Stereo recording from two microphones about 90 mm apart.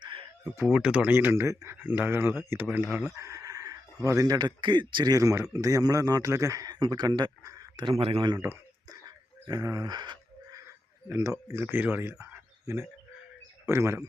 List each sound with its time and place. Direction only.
0.0 s a sound: 70° right (ahead or behind)
0.6 s speech: 15° right (ahead or behind)
1.1 s speech: 25° right (ahead or behind)
3.2 s speech: 35° right (ahead or behind); by 5.1 s 60° right (ahead or behind)
5.1 s a man's voice: 35° right (ahead or behind)
6.7 s speech: 55° right (ahead or behind)
7.8 s speech: 75° right (ahead or behind)
8.9 s a sound: 45° right (ahead or behind)
11.1 s a man's voice: 35° right (ahead or behind)
11.7 s speech: 20° right (ahead or behind)
12.2 s a sound: 30° right (ahead or behind)
13.7 s speech: 30° right (ahead or behind)